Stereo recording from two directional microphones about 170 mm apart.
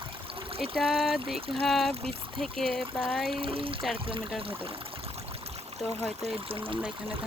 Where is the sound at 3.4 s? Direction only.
30° right (ahead or behind).